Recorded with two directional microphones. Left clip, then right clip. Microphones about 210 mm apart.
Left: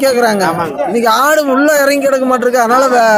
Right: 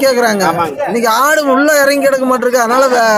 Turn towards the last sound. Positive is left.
turn(degrees=0)  # may be behind; listen again after turning